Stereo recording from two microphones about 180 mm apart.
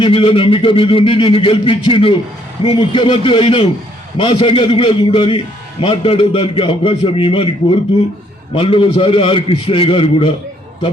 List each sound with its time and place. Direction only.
0.0 s speech: 30° left (ahead or behind)
8.5 s speech: 30° left (ahead or behind)